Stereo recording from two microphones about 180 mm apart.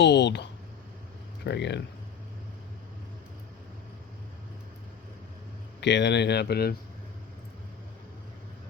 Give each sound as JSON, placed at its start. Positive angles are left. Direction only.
{"t": 0.0, "sound": "speech", "side_deg": 75}
{"t": 1.5, "sound": "speech", "side_deg": 75}
{"t": 5.8, "sound": "speech", "side_deg": 75}